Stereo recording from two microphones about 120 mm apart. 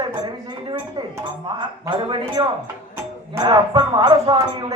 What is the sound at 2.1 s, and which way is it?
A woman's voice, 45° right (ahead or behind).